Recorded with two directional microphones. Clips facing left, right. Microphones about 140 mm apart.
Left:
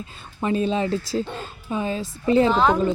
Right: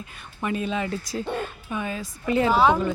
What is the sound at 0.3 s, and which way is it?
A woman's voice, 30° left (ahead or behind).